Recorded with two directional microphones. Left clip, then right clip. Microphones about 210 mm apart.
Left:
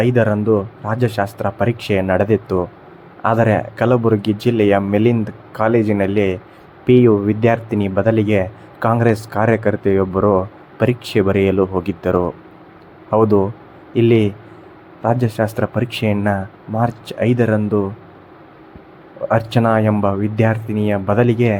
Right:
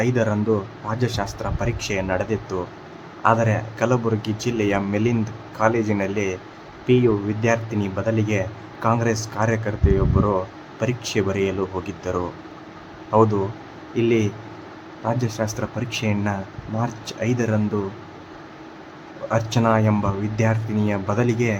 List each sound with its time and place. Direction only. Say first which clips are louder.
0.0 s a man's voice: left 6 dB; 15° left (ahead or behind)
19.3 s speech: left 4 dB; 15° left (ahead or behind)